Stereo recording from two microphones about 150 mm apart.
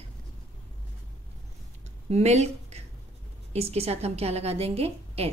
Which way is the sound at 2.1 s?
45° right (ahead or behind).